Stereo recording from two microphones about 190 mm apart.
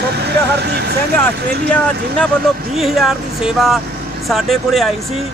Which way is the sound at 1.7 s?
5° left (ahead or behind).